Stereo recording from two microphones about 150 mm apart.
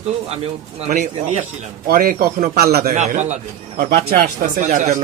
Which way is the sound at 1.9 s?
75° right (ahead or behind).